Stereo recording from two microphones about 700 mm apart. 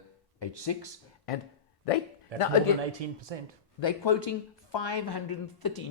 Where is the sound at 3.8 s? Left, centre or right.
Left.